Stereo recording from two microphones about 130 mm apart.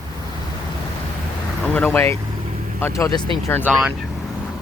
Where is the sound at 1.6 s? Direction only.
10° left (ahead or behind); by 3.2 s 25° left (ahead or behind).